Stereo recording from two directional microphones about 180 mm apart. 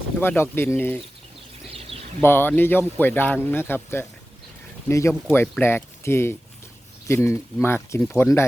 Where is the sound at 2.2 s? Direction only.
10° left (ahead or behind).